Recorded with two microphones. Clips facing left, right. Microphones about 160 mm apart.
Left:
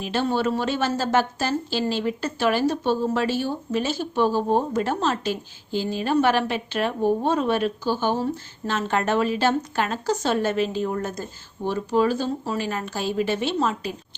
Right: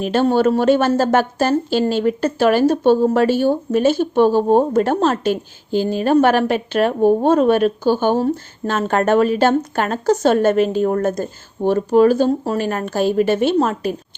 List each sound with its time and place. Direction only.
0.0 s speech: 50° right (ahead or behind)